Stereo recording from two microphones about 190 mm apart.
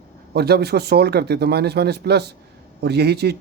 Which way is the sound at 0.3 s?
55° right (ahead or behind).